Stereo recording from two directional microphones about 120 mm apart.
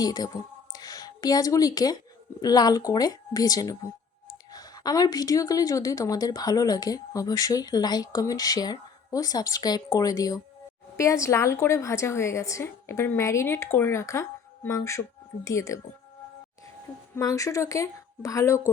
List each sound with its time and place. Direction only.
0.0 s a woman's voice: 30° left (ahead or behind)
0.7 s a sound: 30° left (ahead or behind)
2.4 s a woman's voice: 35° left (ahead or behind)
17.2 s a woman's voice: 25° left (ahead or behind)